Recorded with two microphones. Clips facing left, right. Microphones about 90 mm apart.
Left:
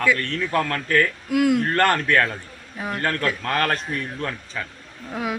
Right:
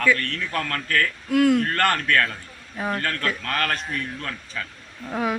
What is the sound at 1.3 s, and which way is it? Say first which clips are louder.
Speech: right 2 dB; 10° left (ahead or behind).